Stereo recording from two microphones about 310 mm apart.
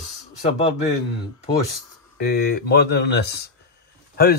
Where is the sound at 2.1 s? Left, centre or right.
Left.